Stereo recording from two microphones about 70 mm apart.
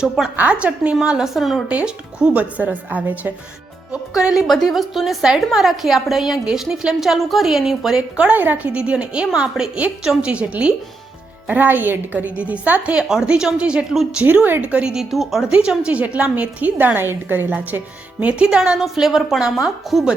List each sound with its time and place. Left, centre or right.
0.3 s a woman's voice: centre
0.9 s a woman's voice: centre
1.7 s a woman's voice: centre
4.6 s a woman's voice: centre
8.1 s a woman's voice: right; by 14.2 s centre
14.3 s a woman's voice: right; by 20.1 s centre